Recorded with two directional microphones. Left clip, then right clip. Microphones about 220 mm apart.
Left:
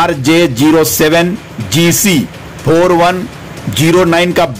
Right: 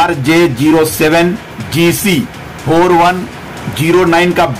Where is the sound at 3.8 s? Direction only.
45° left (ahead or behind).